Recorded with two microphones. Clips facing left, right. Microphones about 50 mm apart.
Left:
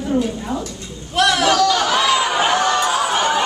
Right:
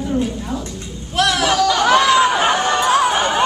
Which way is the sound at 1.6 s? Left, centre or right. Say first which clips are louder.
Even; centre.